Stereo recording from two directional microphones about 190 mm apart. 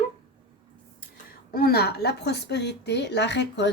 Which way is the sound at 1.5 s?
55° left (ahead or behind).